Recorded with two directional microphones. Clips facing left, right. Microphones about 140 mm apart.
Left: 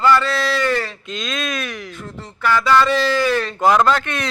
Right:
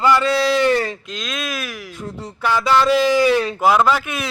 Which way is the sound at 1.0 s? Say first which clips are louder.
Left 2 dB; centre (ahead or behind).